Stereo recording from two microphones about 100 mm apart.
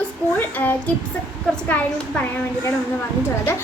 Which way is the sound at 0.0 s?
20° left (ahead or behind).